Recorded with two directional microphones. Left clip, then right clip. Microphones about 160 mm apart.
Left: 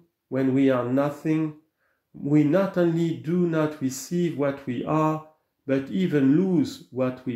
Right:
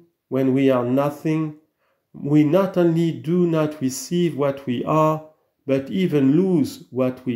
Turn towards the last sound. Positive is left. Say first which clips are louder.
# right 3 dB
turn(degrees=-30)  # may be behind; listen again after turning